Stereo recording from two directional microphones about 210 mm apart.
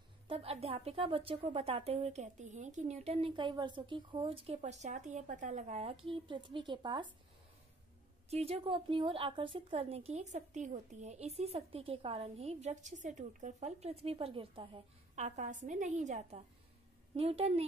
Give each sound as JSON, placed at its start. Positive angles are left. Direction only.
{"t": 0.3, "sound": "a woman's voice", "side_deg": -25}
{"t": 8.3, "sound": "a woman's voice", "side_deg": -30}